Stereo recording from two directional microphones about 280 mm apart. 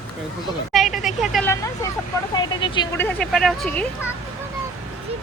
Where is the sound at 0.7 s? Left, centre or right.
Centre.